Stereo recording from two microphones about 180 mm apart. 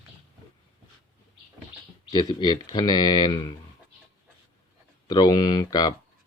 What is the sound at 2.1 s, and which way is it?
Speech, 20° left (ahead or behind).